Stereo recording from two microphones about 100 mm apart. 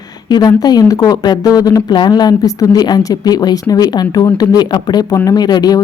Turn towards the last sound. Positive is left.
turn(degrees=45)  # may be behind; listen again after turning